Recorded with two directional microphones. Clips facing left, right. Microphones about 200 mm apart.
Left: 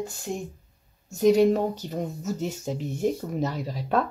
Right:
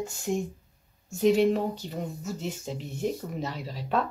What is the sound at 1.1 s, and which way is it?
Speech, 40° left (ahead or behind).